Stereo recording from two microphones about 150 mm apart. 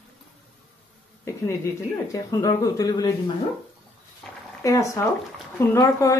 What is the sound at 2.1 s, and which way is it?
Speech, 20° left (ahead or behind).